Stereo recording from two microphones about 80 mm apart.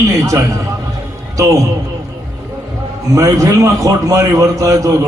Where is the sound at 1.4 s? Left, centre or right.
Right.